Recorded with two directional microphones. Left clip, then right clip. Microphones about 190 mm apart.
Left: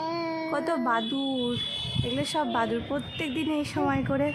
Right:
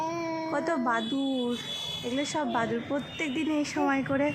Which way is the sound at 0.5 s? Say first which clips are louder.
Left 1 dB; 10° left (ahead or behind).